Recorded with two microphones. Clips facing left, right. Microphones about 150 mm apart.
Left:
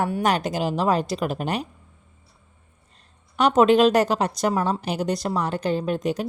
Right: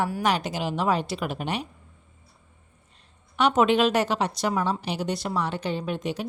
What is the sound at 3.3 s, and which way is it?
A woman's voice, 40° left (ahead or behind).